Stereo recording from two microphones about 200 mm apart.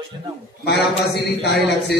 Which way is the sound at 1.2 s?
55° left (ahead or behind).